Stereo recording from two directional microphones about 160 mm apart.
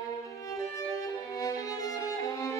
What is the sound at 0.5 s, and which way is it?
Violin, 20° left (ahead or behind).